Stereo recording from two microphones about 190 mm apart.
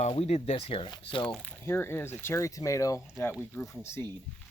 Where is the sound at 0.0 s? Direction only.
35° left (ahead or behind).